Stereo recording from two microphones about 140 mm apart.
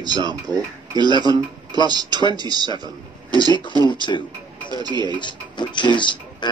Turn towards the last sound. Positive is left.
turn(degrees=35)  # may be behind; listen again after turning